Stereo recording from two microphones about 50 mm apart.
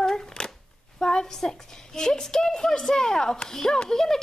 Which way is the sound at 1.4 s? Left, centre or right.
Centre.